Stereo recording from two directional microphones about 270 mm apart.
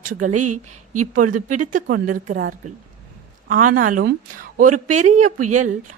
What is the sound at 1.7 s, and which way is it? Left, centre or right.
Speech, right.